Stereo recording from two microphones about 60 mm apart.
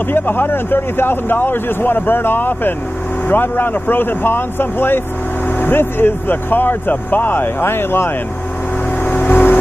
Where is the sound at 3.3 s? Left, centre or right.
Left.